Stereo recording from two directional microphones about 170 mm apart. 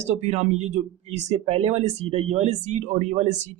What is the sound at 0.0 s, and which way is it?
Speech, 40° right (ahead or behind).